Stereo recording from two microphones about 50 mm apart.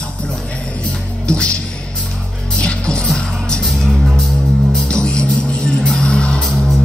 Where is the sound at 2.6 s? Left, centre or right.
Centre.